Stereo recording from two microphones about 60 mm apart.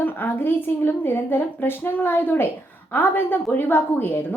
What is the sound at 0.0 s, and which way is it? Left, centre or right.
Speech, left.